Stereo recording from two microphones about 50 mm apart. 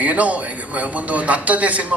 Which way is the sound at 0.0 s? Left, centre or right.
Right.